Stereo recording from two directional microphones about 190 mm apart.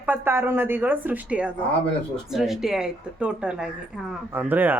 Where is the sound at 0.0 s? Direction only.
10° right (ahead or behind).